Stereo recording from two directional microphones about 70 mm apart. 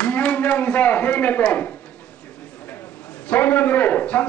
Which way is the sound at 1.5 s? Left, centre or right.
Left.